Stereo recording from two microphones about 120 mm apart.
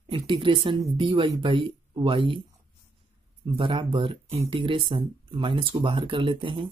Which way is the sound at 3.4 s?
45° right (ahead or behind).